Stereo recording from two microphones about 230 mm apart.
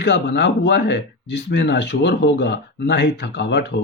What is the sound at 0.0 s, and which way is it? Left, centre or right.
A man's voice, left.